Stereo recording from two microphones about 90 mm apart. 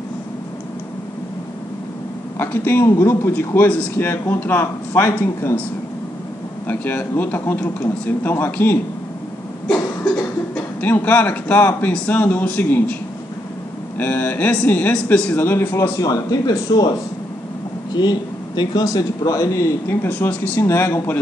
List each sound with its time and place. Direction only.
2.3 s speech: 25° left (ahead or behind)
6.7 s speech: 20° left (ahead or behind)
10.8 s speech: 20° left (ahead or behind)
13.9 s a man's voice: 20° left (ahead or behind)
15.3 s speech: 25° left (ahead or behind)
16.0 s speech: 45° left (ahead or behind)
18.6 s speech: 50° left (ahead or behind); by 20.6 s 20° left (ahead or behind)
20.6 s speech: 30° left (ahead or behind)